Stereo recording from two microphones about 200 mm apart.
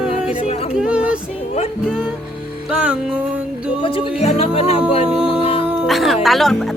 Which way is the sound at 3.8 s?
25° left (ahead or behind).